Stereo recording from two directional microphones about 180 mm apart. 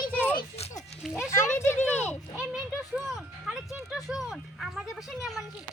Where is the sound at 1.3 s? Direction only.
15° left (ahead or behind).